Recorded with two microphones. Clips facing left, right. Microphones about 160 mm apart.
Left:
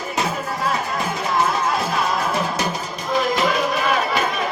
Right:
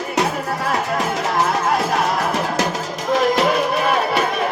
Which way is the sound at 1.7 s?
70° right (ahead or behind).